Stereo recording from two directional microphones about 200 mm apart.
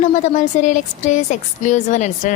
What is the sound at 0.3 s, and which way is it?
A woman's voice, 35° left (ahead or behind).